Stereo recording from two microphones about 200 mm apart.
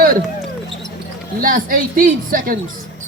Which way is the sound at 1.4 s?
45° right (ahead or behind).